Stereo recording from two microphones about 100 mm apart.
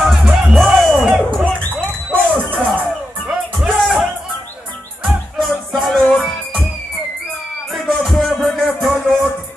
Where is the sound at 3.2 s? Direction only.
5° right (ahead or behind).